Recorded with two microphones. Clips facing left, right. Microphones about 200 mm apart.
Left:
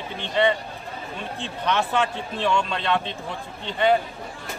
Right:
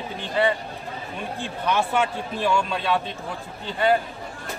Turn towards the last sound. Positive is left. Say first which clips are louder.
# left 1 dB
turn(degrees=-5)  # may be behind; listen again after turning